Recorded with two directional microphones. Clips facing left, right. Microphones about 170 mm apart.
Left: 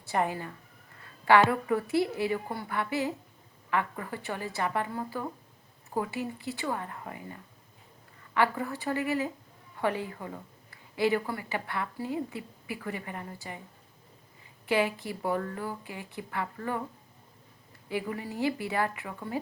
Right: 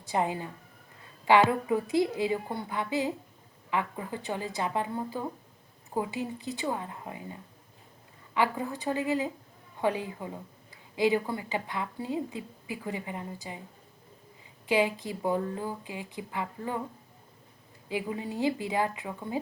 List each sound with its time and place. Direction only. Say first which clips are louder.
0.0 s a woman's voice: even; 15° right (ahead or behind)
14.7 s a woman's voice: right 1 dB; 15° right (ahead or behind)
17.8 s a woman's voice: right 1 dB; 15° right (ahead or behind)